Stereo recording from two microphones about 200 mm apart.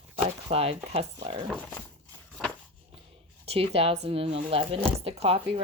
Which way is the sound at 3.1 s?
30° right (ahead or behind).